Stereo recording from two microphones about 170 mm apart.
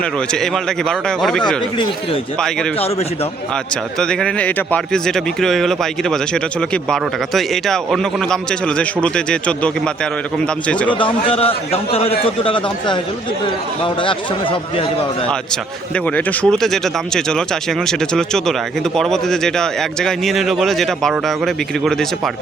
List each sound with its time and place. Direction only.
0.3 s speech: 5° left (ahead or behind)
4.0 s speech: 5° left (ahead or behind)
11.3 s a man's voice: 35° left (ahead or behind)
16.0 s speech: 10° left (ahead or behind)